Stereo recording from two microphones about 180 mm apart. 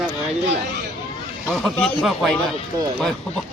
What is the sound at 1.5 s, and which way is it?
Speech, centre (ahead or behind).